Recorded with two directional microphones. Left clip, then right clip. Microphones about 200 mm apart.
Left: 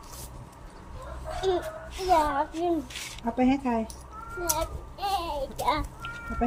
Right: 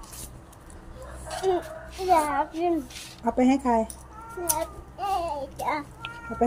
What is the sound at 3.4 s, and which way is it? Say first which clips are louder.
Speech: right 3 dB; 25° right (ahead or behind).